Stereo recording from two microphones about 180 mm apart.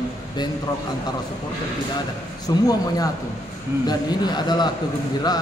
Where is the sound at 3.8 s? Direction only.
25° left (ahead or behind).